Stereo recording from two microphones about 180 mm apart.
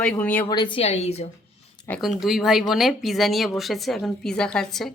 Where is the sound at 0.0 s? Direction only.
10° left (ahead or behind).